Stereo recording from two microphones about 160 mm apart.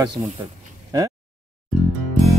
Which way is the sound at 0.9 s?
25° right (ahead or behind).